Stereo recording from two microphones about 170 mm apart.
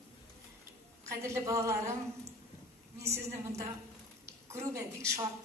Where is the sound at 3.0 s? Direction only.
15° right (ahead or behind).